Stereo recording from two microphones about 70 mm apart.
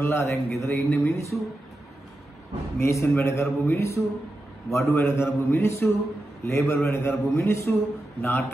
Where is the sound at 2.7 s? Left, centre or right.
Left.